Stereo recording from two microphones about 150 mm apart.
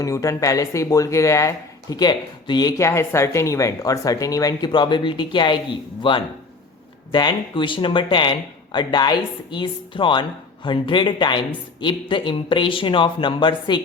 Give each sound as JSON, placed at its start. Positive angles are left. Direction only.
{"t": 0.0, "sound": "speech", "side_deg": 20}